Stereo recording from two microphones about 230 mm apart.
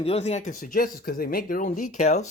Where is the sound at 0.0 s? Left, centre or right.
Left.